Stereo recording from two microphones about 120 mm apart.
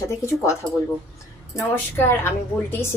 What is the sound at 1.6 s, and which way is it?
A woman's voice, 20° left (ahead or behind).